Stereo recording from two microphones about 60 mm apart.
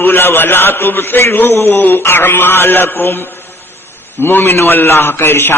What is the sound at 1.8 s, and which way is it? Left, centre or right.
Mantra, left.